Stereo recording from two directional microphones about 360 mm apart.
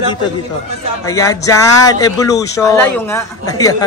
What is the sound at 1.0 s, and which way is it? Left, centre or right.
Speech, centre.